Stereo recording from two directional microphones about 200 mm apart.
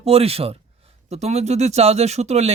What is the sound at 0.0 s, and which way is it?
A woman's voice, 30° right (ahead or behind).